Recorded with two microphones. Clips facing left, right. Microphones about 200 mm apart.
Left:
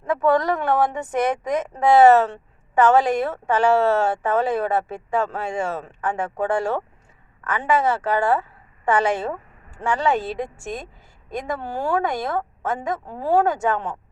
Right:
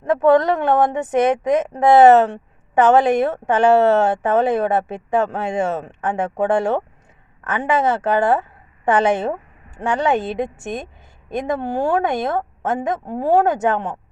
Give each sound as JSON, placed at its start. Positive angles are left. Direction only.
{"t": 0.0, "sound": "a woman's voice", "side_deg": -20}